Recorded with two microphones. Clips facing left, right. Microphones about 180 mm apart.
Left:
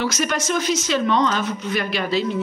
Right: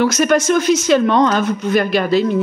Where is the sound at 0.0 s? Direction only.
50° right (ahead or behind).